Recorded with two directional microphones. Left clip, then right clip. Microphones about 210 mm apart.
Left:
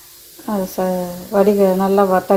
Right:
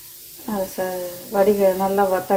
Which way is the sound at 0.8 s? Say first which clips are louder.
Left 5 dB; 30° left (ahead or behind).